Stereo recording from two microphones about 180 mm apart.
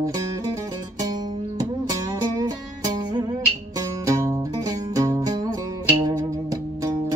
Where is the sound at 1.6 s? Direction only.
20° right (ahead or behind).